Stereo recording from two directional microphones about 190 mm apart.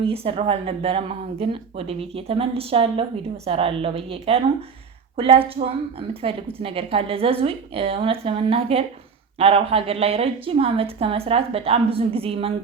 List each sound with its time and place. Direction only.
0.0 s a woman's voice: 30° right (ahead or behind)